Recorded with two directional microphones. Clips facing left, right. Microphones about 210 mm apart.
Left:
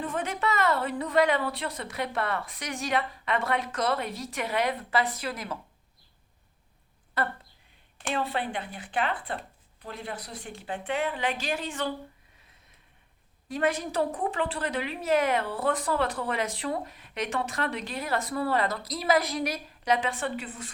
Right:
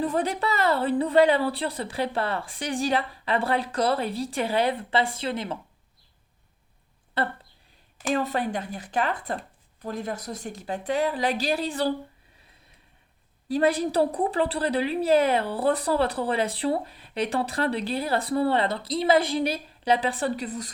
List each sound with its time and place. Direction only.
0.0 s a woman's voice: 35° right (ahead or behind)
7.2 s speech: 30° right (ahead or behind)
8.1 s a woman's voice: 40° right (ahead or behind)
13.5 s a woman's voice: 35° right (ahead or behind)